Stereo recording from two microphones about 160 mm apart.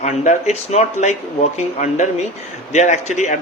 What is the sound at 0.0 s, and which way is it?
A man's voice, 45° left (ahead or behind).